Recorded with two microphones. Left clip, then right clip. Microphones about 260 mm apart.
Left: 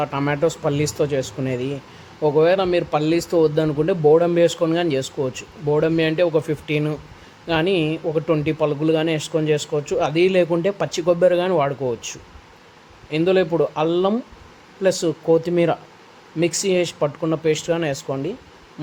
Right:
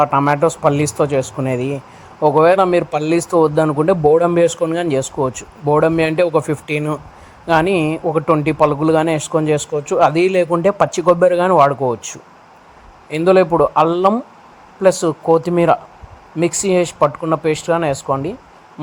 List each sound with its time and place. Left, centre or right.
0.0 s speech: centre